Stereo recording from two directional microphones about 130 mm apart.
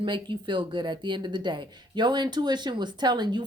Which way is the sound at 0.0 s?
40° right (ahead or behind).